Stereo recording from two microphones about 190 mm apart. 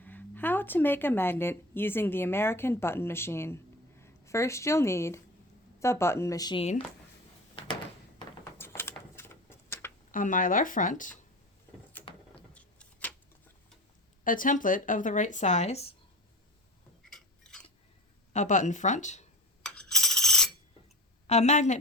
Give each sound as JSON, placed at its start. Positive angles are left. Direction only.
{"t": 0.0, "sound": "speech", "side_deg": 10}
{"t": 8.5, "sound": "a sound", "side_deg": 10}
{"t": 10.1, "sound": "speech", "side_deg": 45}
{"t": 12.0, "sound": "a sound", "side_deg": 10}
{"t": 14.3, "sound": "speech", "side_deg": 45}
{"t": 17.1, "sound": "a sound", "side_deg": 5}
{"t": 18.3, "sound": "speech", "side_deg": 40}
{"t": 19.6, "sound": "coin", "side_deg": 5}
{"t": 21.2, "sound": "speech", "side_deg": 35}